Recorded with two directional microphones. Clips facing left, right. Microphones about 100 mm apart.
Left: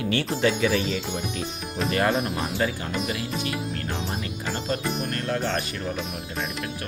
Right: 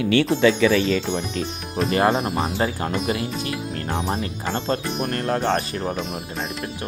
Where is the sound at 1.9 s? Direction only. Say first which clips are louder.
Right 4 dB; 30° right (ahead or behind).